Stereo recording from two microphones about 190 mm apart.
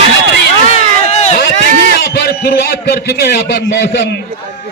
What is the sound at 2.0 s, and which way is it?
A man's voice, 55° left (ahead or behind).